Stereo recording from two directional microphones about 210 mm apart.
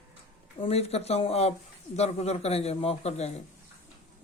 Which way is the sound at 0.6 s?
30° left (ahead or behind).